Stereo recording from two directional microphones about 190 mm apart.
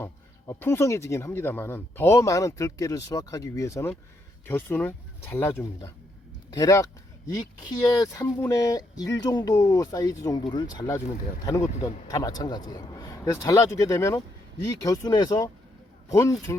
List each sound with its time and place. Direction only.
0.0 s speech: 10° left (ahead or behind)
12.0 s speech: 20° left (ahead or behind)